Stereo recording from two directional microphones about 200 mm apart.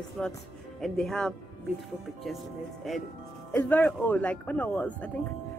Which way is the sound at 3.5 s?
5° left (ahead or behind).